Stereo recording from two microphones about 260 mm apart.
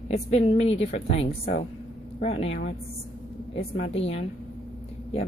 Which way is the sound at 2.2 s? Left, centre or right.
Left.